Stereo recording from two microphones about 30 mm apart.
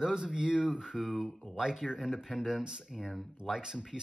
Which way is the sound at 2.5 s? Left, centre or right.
Right.